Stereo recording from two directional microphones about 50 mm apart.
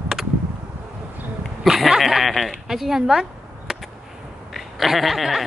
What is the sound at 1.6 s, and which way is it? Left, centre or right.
Speech, centre.